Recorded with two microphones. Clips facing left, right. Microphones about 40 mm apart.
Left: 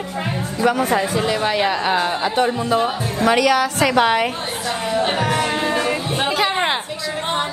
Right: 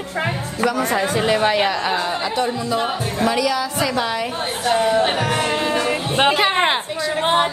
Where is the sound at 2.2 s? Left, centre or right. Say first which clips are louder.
Left 3 dB; left.